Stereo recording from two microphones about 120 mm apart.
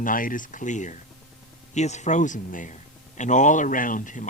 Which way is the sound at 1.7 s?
75° left (ahead or behind).